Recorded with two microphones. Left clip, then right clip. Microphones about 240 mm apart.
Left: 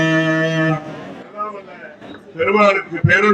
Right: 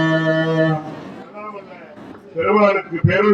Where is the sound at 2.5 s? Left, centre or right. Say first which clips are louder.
Left 1 dB; left.